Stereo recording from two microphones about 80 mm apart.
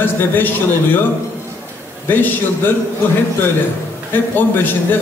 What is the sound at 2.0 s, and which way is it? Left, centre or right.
Speech, left.